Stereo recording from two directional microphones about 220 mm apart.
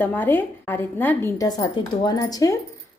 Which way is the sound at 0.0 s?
10° left (ahead or behind).